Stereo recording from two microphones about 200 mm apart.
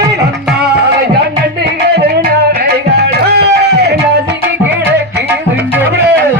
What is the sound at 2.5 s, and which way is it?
Music, 55° right (ahead or behind).